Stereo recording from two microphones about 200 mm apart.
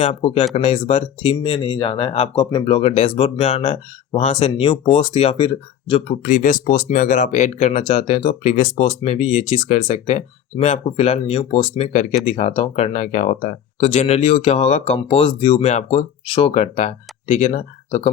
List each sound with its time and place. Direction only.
0.0 s speech: 30° left (ahead or behind)